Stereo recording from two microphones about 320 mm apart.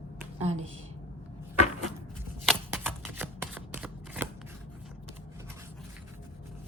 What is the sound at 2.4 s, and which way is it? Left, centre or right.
Shuffling cards, centre.